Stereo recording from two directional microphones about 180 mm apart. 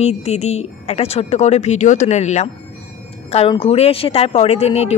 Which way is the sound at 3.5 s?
30° left (ahead or behind).